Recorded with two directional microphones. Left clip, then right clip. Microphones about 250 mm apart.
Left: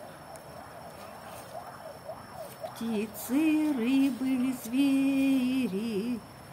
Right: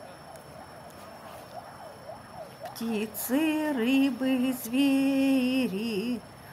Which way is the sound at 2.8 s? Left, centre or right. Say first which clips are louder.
Right 2 dB; centre.